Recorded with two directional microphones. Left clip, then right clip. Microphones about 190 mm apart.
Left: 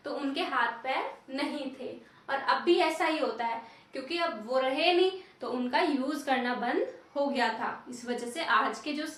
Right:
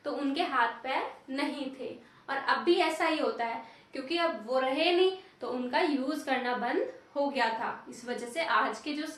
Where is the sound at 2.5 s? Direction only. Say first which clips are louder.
Left 1 dB; 20° right (ahead or behind).